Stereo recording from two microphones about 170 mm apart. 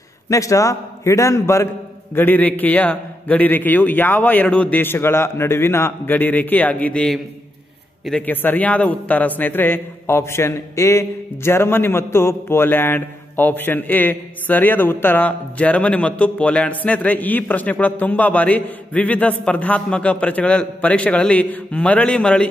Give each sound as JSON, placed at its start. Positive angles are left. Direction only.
{"t": 0.3, "sound": "a man's voice", "side_deg": 20}